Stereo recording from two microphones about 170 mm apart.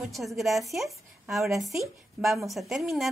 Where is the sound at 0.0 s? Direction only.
Centre (ahead or behind).